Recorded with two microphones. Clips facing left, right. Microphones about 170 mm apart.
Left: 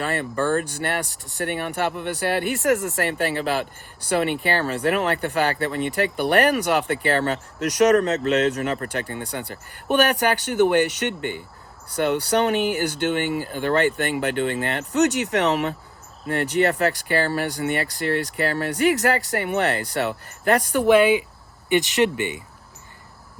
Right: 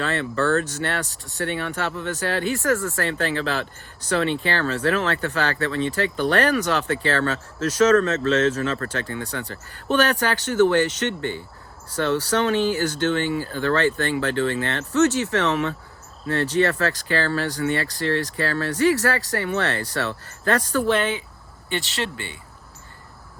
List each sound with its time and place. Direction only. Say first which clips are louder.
0.0 s speech: right 1 dB; 15° left (ahead or behind)